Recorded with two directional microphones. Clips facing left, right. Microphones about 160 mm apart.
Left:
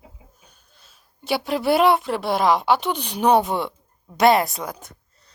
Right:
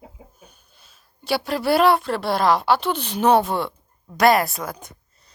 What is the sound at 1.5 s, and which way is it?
A woman's voice, 20° left (ahead or behind).